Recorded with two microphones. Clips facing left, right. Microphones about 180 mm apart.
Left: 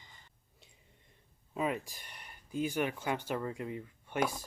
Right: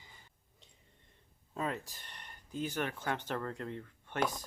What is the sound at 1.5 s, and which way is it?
Speech, 15° left (ahead or behind).